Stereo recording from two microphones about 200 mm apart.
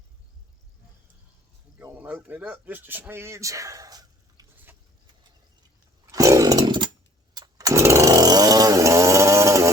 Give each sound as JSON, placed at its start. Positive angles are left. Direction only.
{"t": 1.8, "sound": "speech", "side_deg": -10}
{"t": 6.1, "sound": "chainsaw", "side_deg": -15}